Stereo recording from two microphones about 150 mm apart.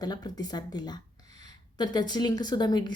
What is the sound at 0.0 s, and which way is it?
A woman's voice, 25° left (ahead or behind).